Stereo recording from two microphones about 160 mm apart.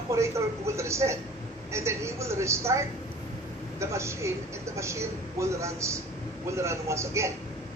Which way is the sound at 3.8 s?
15° right (ahead or behind).